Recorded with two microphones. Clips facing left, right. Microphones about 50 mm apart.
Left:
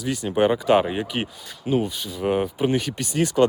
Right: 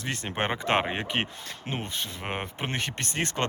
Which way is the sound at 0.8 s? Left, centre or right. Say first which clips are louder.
Left 3 dB; right.